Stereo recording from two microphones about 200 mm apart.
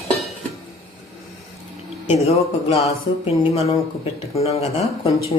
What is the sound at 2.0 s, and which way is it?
Speech, 30° left (ahead or behind).